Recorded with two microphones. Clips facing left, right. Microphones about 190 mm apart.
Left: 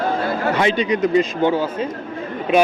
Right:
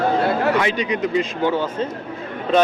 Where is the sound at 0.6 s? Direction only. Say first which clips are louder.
Left 3 dB; 30° left (ahead or behind).